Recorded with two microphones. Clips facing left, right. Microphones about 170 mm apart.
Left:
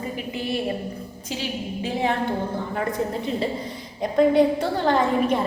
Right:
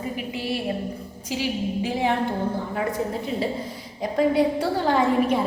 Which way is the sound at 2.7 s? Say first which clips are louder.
Even; 5° right (ahead or behind).